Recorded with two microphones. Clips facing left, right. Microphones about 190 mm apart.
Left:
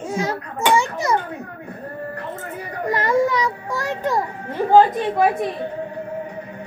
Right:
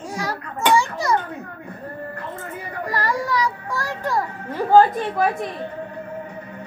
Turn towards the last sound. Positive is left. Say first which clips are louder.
# left 1 dB
turn(degrees=20)  # may be behind; listen again after turning